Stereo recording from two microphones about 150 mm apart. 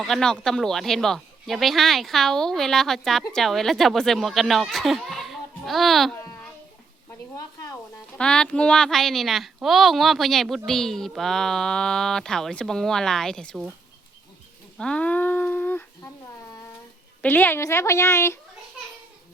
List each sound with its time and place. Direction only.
0.0 s speech: 5° left (ahead or behind)
7.3 s speech: 25° left (ahead or behind)
8.2 s speech: 5° left (ahead or behind)
14.8 s a sound: 5° left (ahead or behind)
17.2 s a woman's voice: 15° left (ahead or behind)